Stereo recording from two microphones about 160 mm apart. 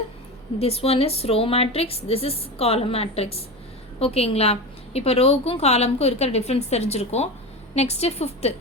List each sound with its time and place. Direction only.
0.6 s a woman's voice: 40° left (ahead or behind)